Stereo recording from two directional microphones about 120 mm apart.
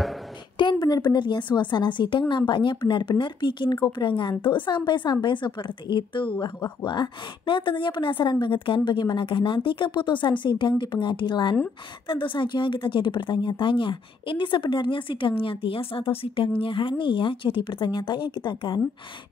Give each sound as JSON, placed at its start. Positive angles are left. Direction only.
{"t": 0.6, "sound": "a woman's voice", "side_deg": 35}